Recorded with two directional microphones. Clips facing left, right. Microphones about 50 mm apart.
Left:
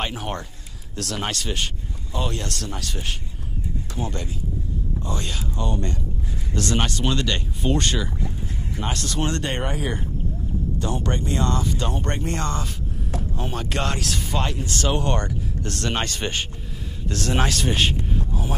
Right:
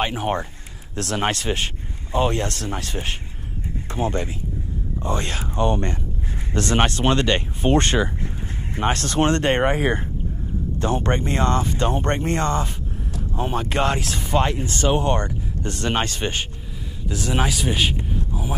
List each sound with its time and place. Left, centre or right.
0.0 s speech: centre
0.9 s speech: right
13.4 s speech: centre
17.1 s speech: centre
17.9 s a sound: centre